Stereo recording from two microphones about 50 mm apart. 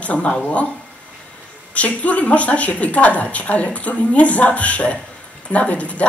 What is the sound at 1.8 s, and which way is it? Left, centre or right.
A woman's voice, left.